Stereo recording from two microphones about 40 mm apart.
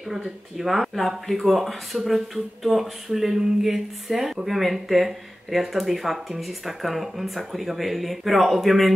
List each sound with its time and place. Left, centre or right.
0.1 s speech: centre